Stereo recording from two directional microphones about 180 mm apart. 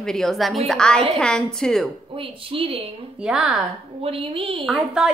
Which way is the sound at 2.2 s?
30° right (ahead or behind).